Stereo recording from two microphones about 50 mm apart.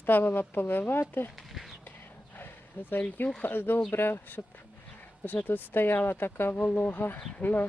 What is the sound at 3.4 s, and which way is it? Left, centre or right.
Speech, left.